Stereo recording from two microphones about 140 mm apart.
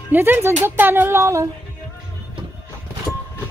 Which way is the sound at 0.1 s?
15° right (ahead or behind).